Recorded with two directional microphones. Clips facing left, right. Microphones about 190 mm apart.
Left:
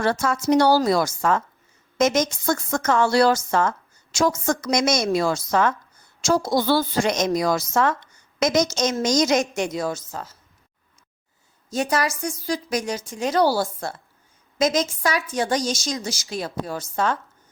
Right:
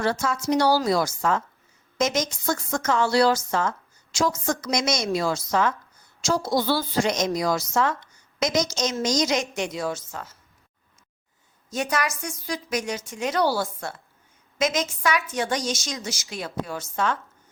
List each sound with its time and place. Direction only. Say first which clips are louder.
0.0 s a woman's voice: left 3 dB; 55° left (ahead or behind); by 10.3 s 35° left (ahead or behind)
11.7 s a woman's voice: left 3 dB; 35° left (ahead or behind)